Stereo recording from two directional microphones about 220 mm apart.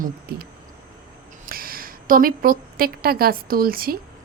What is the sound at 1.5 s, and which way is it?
A woman's voice, 40° right (ahead or behind).